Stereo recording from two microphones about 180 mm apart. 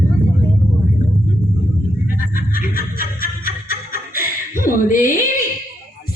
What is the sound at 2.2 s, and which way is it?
Music, 50° left (ahead or behind).